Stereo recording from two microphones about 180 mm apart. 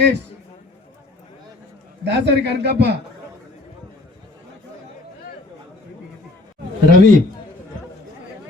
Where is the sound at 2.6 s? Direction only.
65° right (ahead or behind).